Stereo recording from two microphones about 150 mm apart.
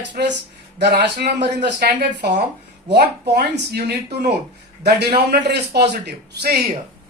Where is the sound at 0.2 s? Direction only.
90° right.